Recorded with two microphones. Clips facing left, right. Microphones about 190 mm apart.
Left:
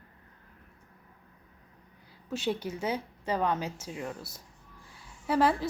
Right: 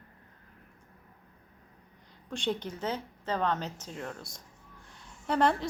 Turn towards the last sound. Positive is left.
turn(degrees=5)  # may be behind; listen again after turning